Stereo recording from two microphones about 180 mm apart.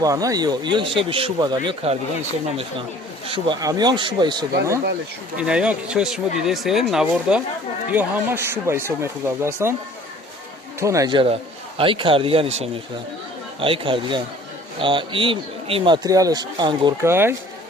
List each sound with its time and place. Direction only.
0.0 s speech: 20° right (ahead or behind)
3.2 s speech: 30° right (ahead or behind)
5.4 s speech: 5° right (ahead or behind)
10.8 s speech: 15° right (ahead or behind)
17.0 s speech: 15° right (ahead or behind)